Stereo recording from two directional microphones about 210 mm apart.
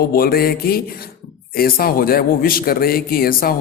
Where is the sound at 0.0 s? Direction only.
45° left (ahead or behind).